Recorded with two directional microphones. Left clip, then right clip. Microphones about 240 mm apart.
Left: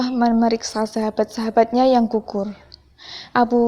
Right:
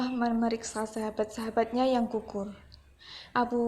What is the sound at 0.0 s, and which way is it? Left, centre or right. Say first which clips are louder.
A woman's voice: left 11 dB; left.